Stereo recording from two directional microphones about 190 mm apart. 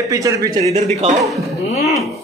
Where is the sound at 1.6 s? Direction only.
35° left (ahead or behind).